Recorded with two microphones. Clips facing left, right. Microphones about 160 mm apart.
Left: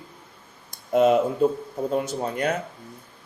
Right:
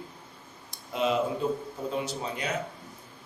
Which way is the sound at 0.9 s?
50° left (ahead or behind).